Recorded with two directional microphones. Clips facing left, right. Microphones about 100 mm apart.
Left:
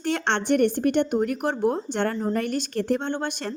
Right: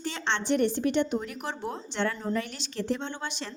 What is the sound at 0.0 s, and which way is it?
A woman's voice, 55° left (ahead or behind).